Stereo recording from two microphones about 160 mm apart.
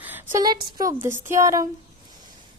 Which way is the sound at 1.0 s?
15° right (ahead or behind).